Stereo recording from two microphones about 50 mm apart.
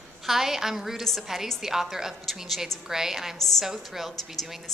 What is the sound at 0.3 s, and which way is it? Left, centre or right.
A woman's voice, centre.